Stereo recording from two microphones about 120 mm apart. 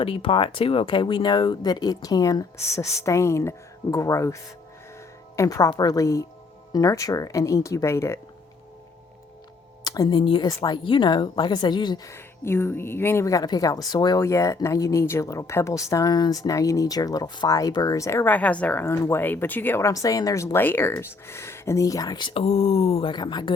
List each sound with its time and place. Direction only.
0.0 s a woman's voice: 50° left (ahead or behind); by 4.4 s 25° left (ahead or behind)
5.4 s a woman's voice: 30° left (ahead or behind)
9.8 s a sound: 30° left (ahead or behind)
10.2 s speech: 45° left (ahead or behind)
10.4 s speech: 35° left (ahead or behind)
12.0 s a woman's voice: 20° left (ahead or behind); by 23.1 s 55° left (ahead or behind)
23.1 s speech: 35° left (ahead or behind)